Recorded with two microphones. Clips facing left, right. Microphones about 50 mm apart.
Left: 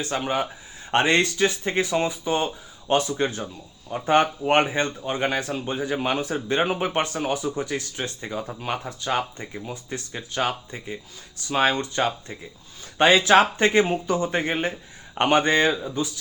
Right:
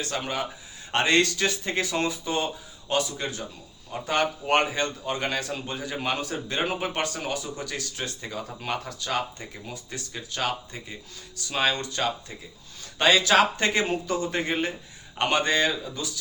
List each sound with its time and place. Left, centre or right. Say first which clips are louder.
0.0 s speech: left 4 dB; left